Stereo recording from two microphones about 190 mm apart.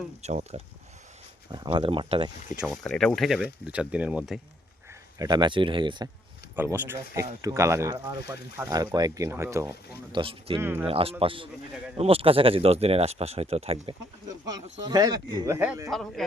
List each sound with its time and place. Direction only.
0.2 s speech: 35° right (ahead or behind)
1.5 s speech: 25° right (ahead or behind)
2.6 s speech: centre (ahead or behind)
5.2 s speech: 20° right (ahead or behind)
6.6 s speech: 10° right (ahead or behind)
10.1 s speech: 25° right (ahead or behind)
10.6 s speech: 10° right (ahead or behind)
10.8 s speech: 30° right (ahead or behind)
14.3 s speech: 20° right (ahead or behind); by 16.2 s centre (ahead or behind)